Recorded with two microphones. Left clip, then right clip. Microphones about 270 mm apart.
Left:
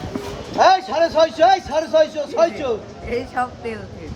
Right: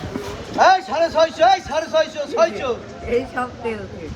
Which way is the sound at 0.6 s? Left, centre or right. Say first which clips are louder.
Even; left.